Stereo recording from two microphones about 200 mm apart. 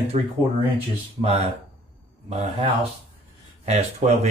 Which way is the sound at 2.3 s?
35° right (ahead or behind).